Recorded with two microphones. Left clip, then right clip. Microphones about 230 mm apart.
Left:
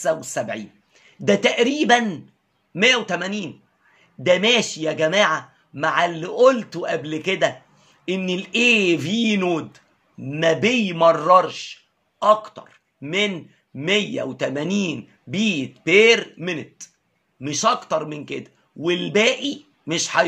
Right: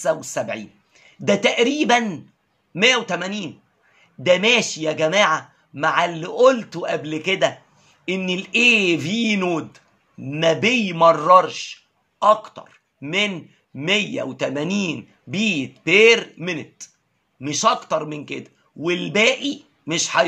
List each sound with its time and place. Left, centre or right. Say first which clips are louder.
0.0 s a man's voice: right 1 dB; centre